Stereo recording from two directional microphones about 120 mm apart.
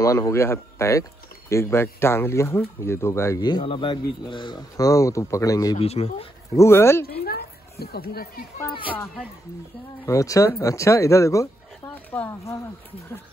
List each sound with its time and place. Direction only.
0.0 s speech: 25° left (ahead or behind)
3.6 s speech: 45° left (ahead or behind); by 5.8 s 30° left (ahead or behind)
5.8 s speech: 60° left (ahead or behind)
6.5 s speech: 20° left (ahead or behind)
10.0 s speech: 25° left (ahead or behind)